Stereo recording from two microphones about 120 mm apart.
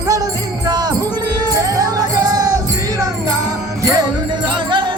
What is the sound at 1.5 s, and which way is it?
Music, 30° right (ahead or behind).